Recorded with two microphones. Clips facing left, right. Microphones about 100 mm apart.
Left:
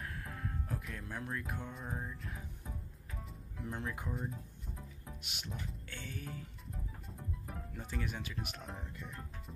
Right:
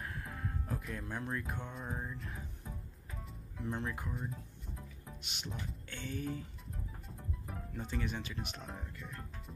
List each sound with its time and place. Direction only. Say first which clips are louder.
0.0 s speech: right 1 dB; 5° right (ahead or behind)
3.2 s music: right 1 dB; centre (ahead or behind)
4.1 s speech: left 1 dB; centre (ahead or behind)